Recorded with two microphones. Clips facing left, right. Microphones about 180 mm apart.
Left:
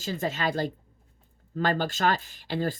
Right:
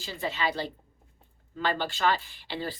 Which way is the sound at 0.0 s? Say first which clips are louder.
Left 2 dB; 45° left (ahead or behind).